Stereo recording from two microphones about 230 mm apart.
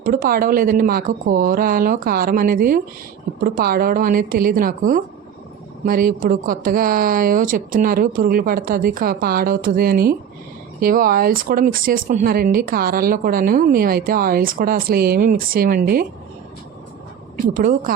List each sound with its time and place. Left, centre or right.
0.0 s speech: right
17.5 s speech: right